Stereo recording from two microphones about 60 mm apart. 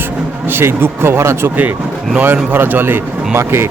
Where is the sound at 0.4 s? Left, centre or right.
Right.